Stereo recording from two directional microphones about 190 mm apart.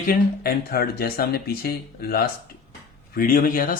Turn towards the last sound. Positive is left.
turn(degrees=50)  # may be behind; listen again after turning